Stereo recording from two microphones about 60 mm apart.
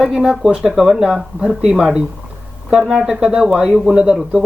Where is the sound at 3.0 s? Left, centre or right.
Centre.